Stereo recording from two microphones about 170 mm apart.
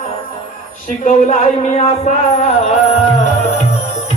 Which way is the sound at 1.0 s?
45° left (ahead or behind).